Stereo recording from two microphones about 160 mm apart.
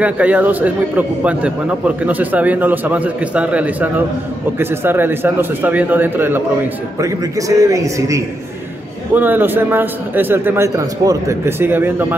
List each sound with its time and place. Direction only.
0.0 s a man's voice: 10° right (ahead or behind)